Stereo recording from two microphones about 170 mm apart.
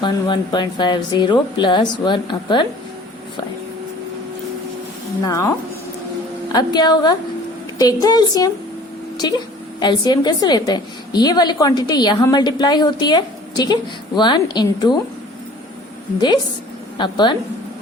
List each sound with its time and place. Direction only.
0.0 s a woman's voice: 25° left (ahead or behind)
5.2 s a woman's voice: 20° left (ahead or behind)
17.0 s a woman's voice: 25° left (ahead or behind)